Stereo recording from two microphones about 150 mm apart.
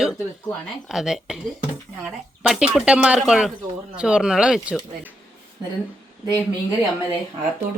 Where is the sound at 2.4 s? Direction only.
5° right (ahead or behind).